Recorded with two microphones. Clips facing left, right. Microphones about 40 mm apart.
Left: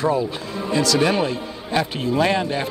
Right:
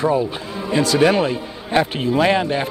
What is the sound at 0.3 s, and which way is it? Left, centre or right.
Speech, right.